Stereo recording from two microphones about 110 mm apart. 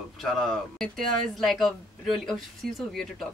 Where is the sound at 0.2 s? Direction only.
5° left (ahead or behind).